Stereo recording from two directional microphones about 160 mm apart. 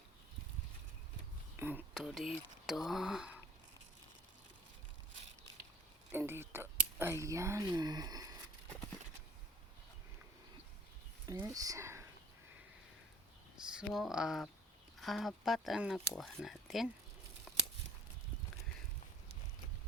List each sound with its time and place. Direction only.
1.5 s a sound: 15° right (ahead or behind)
1.9 s speech: centre (ahead or behind)
6.1 s speech: 15° right (ahead or behind)
11.3 s speech: 20° right (ahead or behind)
13.7 s speech: 5° right (ahead or behind)